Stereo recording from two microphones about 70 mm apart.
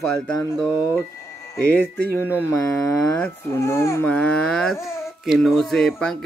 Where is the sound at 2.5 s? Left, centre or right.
Left.